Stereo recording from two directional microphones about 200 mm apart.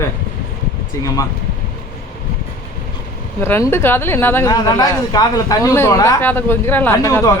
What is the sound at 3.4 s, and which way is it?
Speech, 10° left (ahead or behind).